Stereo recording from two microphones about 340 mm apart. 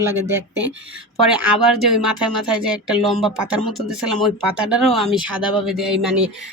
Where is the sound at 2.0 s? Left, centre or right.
Centre.